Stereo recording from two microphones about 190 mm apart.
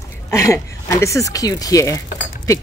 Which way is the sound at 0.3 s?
15° left (ahead or behind).